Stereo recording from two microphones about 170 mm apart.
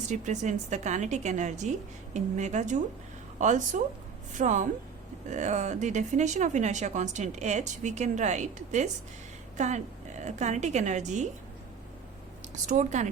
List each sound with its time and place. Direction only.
0.1 s a woman's voice: 45° right (ahead or behind)
12.6 s a woman's voice: 45° right (ahead or behind)